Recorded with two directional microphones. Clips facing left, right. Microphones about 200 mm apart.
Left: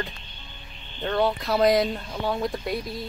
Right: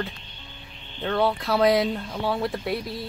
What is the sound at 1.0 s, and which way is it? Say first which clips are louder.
Speech: even; centre (ahead or behind).